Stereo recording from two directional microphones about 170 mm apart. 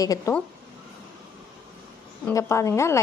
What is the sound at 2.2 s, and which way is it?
Speech, 15° left (ahead or behind).